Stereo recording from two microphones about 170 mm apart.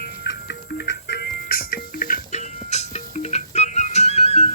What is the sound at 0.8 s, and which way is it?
Music, 70° left (ahead or behind).